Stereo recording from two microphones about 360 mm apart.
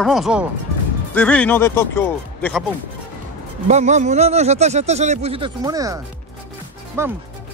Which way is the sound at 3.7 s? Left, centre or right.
Centre.